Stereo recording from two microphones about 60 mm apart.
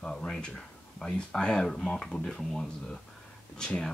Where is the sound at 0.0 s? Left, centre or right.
Centre.